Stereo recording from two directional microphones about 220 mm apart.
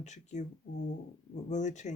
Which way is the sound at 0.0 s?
35° left (ahead or behind).